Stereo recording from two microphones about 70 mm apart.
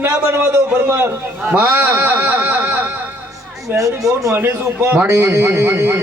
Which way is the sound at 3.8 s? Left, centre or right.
Right.